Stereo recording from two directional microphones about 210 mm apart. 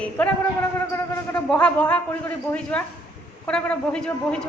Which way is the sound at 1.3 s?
5° left (ahead or behind).